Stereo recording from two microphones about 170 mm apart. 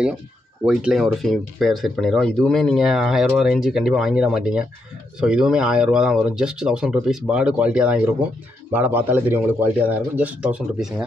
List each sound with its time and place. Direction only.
0.7 s a man's voice: centre (ahead or behind)